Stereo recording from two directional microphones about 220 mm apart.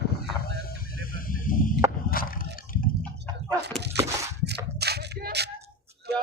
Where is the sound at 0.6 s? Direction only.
40° left (ahead or behind).